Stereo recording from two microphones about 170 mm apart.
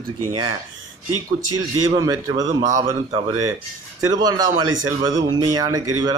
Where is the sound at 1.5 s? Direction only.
20° right (ahead or behind).